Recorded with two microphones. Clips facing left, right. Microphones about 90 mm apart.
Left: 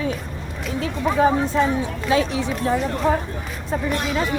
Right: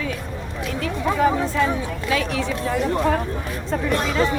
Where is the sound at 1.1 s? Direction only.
20° left (ahead or behind).